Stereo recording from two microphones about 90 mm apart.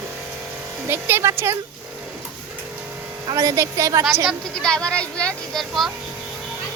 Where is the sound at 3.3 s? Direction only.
35° right (ahead or behind).